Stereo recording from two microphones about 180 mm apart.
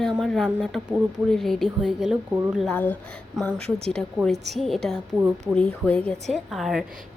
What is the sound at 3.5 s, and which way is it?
Speech, 35° right (ahead or behind).